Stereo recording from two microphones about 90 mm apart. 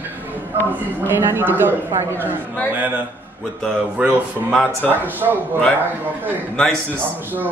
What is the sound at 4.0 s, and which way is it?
Speech, 10° right (ahead or behind).